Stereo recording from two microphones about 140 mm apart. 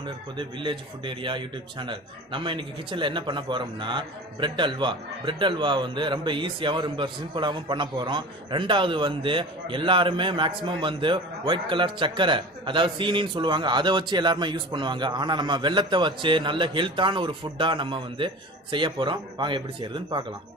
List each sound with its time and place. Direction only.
0.0 s a man's voice: 35° right (ahead or behind)